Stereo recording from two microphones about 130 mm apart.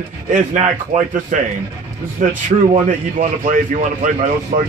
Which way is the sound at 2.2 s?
90° right.